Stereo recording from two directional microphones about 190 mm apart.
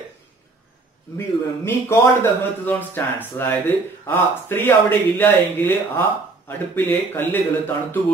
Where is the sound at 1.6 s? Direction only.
10° left (ahead or behind).